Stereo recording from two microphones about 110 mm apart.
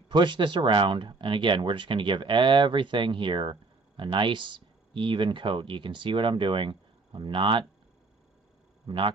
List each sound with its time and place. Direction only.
0.1 s speech: 45° right (ahead or behind)
8.8 s speech: 50° right (ahead or behind)